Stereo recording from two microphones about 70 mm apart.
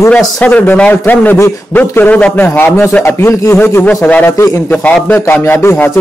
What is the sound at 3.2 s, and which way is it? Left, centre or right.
Speech, left.